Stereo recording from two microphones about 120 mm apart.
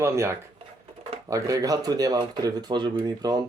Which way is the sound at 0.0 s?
25° right (ahead or behind).